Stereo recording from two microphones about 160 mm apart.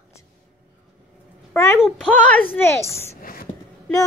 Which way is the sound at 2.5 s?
15° left (ahead or behind).